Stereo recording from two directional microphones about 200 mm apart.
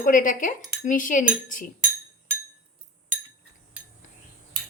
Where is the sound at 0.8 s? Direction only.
40° left (ahead or behind).